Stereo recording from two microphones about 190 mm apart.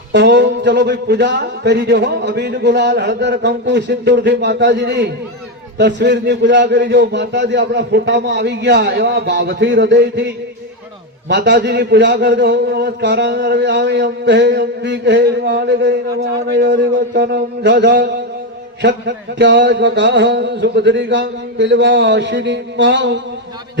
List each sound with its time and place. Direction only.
0.1 s a man's voice: 65° right (ahead or behind)
11.3 s a man's voice: 65° right (ahead or behind)
18.8 s a sound: 65° right (ahead or behind)